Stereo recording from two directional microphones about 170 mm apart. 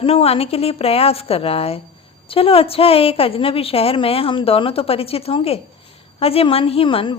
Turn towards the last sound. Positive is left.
turn(degrees=30)  # may be behind; listen again after turning